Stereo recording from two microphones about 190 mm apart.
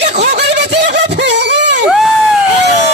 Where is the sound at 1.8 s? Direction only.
Centre (ahead or behind).